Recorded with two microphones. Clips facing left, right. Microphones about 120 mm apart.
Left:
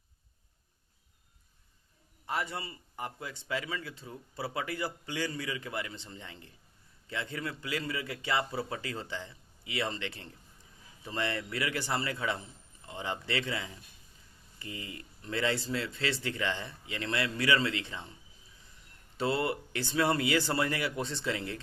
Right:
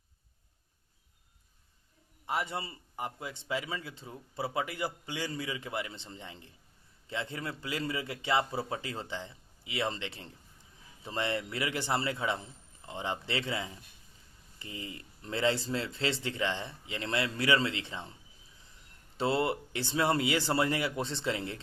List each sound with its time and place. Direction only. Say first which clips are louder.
2.2 s a man's voice: right 1 dB; 20° right (ahead or behind)
19.1 s a man's voice: right 1 dB; 25° right (ahead or behind)